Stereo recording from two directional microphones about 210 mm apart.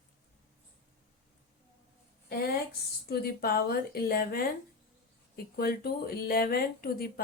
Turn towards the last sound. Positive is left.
turn(degrees=45)  # may be behind; listen again after turning